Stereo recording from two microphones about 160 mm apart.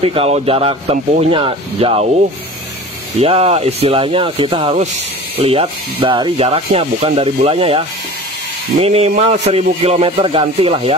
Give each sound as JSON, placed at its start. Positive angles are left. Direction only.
{"t": 0.0, "sound": "speech", "side_deg": -35}
{"t": 3.2, "sound": "speech", "side_deg": -40}
{"t": 8.8, "sound": "speech", "side_deg": -40}